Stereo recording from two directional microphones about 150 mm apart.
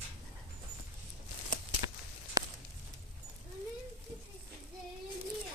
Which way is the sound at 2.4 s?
25° right (ahead or behind).